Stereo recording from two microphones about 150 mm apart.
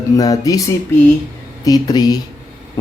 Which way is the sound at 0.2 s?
25° left (ahead or behind).